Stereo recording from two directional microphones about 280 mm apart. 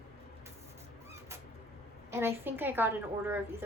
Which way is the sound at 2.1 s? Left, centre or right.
Centre.